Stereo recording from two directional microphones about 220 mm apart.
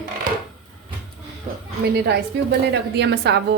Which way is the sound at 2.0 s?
50° right (ahead or behind).